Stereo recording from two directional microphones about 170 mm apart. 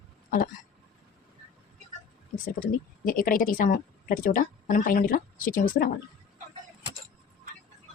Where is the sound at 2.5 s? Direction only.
55° left (ahead or behind).